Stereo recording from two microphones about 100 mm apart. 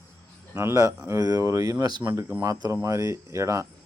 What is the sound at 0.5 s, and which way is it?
A man's voice, 30° right (ahead or behind).